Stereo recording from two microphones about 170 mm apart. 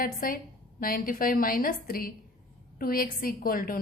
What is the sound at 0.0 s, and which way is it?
A woman's voice, 55° left (ahead or behind).